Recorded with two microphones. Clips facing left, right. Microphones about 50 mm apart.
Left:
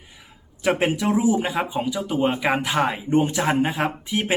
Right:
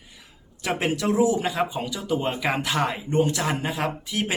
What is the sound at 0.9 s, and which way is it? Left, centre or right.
A man's voice, left.